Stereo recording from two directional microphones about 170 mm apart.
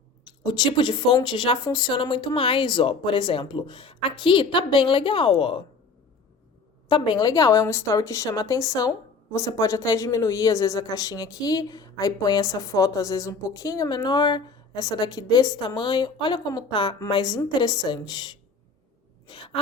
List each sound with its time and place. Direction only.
0.4 s speech: 25° left (ahead or behind)
6.8 s speech: 25° left (ahead or behind)